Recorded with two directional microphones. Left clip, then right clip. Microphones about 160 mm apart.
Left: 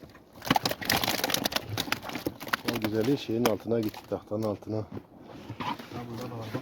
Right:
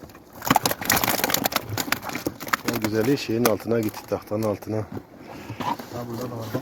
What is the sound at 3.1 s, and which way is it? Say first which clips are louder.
Speech: right 6 dB; 10° left (ahead or behind).